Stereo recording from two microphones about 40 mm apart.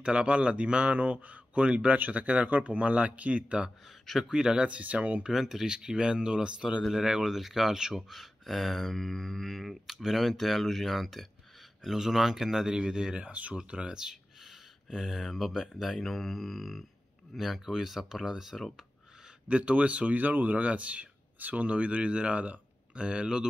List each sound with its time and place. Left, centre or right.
0.0 s a man's voice: right
4.0 s speech: centre
4.3 s speech: centre
4.6 s a man's voice: right
5.3 s speech: centre
5.7 s speech: right
7.3 s speech: centre
13.2 s a man's voice: right
13.9 s speech: centre
19.4 s a man's voice: right
21.6 s speech: right